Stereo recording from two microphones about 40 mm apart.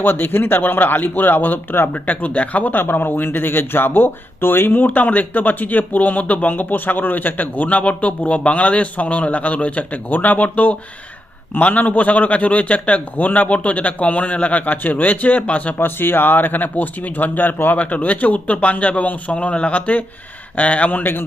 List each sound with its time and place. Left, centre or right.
0.0 s speech: left
1.9 s a man's voice: left
2.8 s a man's voice: left
3.2 s speech: left
4.9 s a man's voice: left
15.8 s a man's voice: left
17.7 s a man's voice: left
21.0 s speech: left